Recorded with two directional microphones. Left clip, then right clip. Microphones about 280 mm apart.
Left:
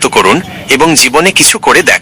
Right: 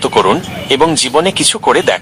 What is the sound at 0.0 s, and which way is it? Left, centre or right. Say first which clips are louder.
Speech: left 3 dB; left.